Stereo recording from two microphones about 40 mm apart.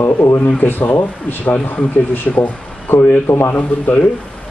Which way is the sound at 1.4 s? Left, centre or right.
Left.